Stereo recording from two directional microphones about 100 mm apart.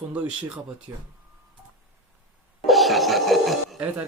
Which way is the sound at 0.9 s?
30° right (ahead or behind).